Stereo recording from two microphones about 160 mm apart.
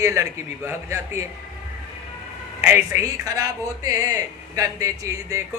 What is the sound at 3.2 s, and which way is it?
Speech, 20° right (ahead or behind).